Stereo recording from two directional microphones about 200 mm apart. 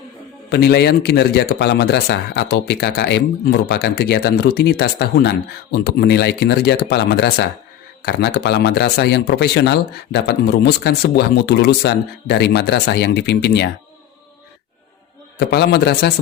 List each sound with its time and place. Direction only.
0.5 s a man's voice: 55° left (ahead or behind)
15.4 s a man's voice: 55° left (ahead or behind)